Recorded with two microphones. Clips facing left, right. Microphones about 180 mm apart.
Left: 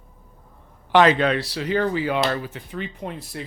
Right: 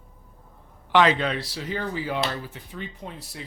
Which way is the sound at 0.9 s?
45° left (ahead or behind).